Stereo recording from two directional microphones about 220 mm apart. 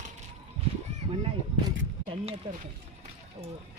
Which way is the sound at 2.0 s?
30° right (ahead or behind).